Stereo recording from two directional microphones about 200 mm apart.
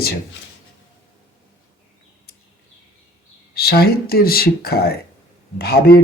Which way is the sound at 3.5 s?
50° left (ahead or behind).